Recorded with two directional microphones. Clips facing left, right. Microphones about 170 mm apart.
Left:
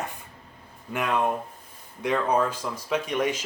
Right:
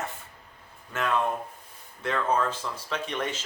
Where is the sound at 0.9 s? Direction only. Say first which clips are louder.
Left 2 dB; 15° left (ahead or behind).